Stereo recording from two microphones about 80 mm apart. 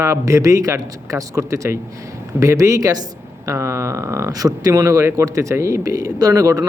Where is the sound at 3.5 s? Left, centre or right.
Right.